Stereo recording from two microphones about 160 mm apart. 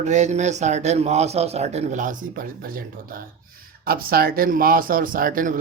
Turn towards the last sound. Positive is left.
turn(degrees=-55)  # may be behind; listen again after turning